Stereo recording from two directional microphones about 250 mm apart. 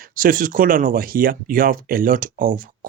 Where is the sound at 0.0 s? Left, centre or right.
Right.